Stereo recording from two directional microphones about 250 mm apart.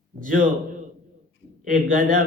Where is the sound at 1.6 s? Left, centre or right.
Right.